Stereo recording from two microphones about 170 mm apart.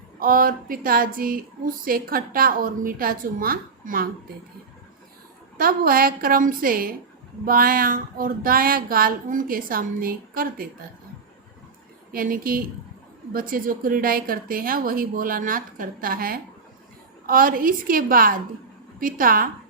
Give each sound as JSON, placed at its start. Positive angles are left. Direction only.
{"t": 0.2, "sound": "speech", "side_deg": -55}
{"t": 5.5, "sound": "speech", "side_deg": -60}
{"t": 12.1, "sound": "speech", "side_deg": -55}